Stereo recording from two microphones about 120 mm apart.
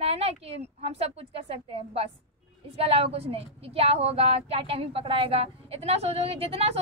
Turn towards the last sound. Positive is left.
turn(degrees=-55)  # may be behind; listen again after turning